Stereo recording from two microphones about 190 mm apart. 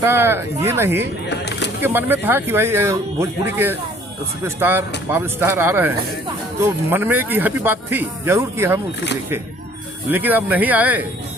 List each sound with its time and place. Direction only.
0.0 s speech: 15° right (ahead or behind)
1.3 s speech: 65° left (ahead or behind)
1.8 s speech: 10° right (ahead or behind)
10.1 s speech: 10° right (ahead or behind)